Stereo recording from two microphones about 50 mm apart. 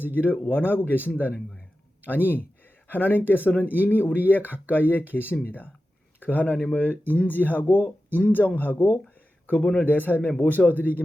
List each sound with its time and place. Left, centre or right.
0.0 s speech: left
9.7 s speech: left